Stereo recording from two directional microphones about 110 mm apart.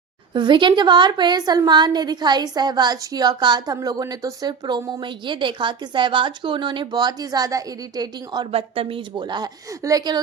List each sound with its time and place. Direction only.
0.3 s speech: 45° right (ahead or behind)
8.5 s speech: 55° right (ahead or behind); by 10.2 s 35° right (ahead or behind)